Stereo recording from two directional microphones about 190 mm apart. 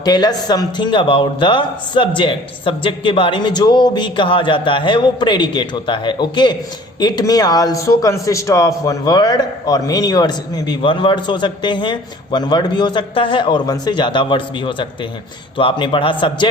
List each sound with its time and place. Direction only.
0.0 s speech: 20° left (ahead or behind)